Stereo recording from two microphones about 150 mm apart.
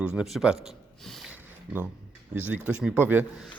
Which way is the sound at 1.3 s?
10° right (ahead or behind).